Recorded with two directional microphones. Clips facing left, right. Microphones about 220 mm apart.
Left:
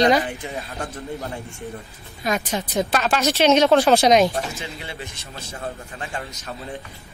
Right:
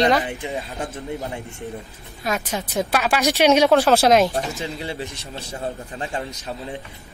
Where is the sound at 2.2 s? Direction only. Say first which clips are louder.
Left 1 dB; 5° right (ahead or behind).